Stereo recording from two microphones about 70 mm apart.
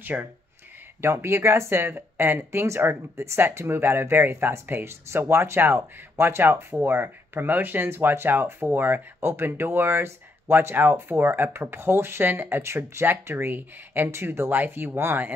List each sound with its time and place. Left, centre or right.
0.0 s speech: right
1.0 s speech: right